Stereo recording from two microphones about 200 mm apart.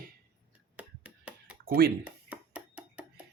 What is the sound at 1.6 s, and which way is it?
Speech, 50° right (ahead or behind).